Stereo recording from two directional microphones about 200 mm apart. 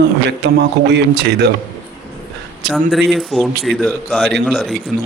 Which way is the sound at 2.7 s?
Centre (ahead or behind).